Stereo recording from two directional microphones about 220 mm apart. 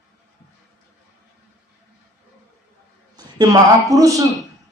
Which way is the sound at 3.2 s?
15° right (ahead or behind).